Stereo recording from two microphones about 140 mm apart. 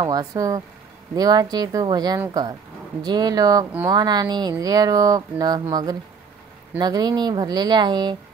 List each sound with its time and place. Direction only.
0.0 s speech: 25° right (ahead or behind)